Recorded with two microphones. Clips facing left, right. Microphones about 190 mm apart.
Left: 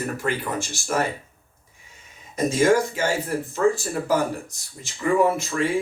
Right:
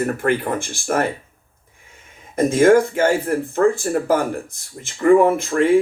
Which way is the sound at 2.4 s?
55° right (ahead or behind).